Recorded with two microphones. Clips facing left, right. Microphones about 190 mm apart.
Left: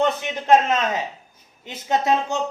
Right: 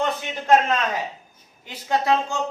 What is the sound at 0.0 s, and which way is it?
A man's voice, 20° left (ahead or behind).